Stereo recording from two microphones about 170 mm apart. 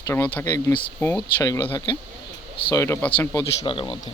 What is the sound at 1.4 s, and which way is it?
Speech, 20° left (ahead or behind).